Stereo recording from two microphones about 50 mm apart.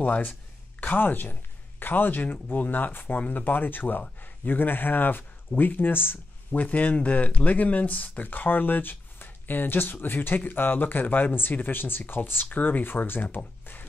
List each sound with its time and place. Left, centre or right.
0.0 s speech: left